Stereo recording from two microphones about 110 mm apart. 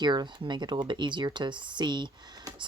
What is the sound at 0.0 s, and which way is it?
Speech, 40° right (ahead or behind).